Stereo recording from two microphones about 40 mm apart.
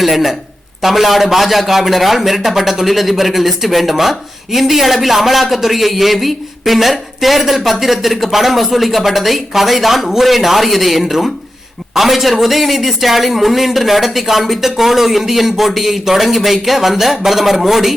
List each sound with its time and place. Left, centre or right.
0.0 s a man's voice: centre